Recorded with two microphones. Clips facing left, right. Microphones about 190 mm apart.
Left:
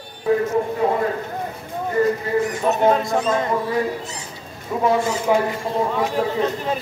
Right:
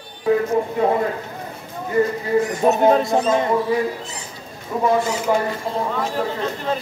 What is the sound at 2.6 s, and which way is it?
Speech, 40° right (ahead or behind).